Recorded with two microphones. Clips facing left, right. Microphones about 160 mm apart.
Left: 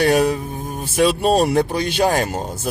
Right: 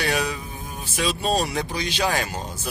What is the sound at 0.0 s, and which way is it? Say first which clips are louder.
Speech: left 9 dB; 50° left (ahead or behind).